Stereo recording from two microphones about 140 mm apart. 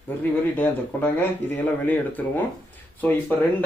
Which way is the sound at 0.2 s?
15° left (ahead or behind).